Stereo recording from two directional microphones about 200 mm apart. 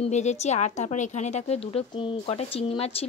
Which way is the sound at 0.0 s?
35° left (ahead or behind).